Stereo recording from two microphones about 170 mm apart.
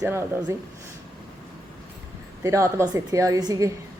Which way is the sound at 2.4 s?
20° right (ahead or behind).